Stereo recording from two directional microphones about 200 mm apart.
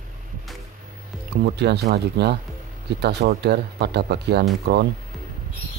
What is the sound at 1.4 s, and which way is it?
Speech, 55° right (ahead or behind).